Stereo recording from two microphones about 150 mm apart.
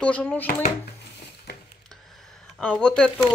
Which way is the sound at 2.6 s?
5° left (ahead or behind).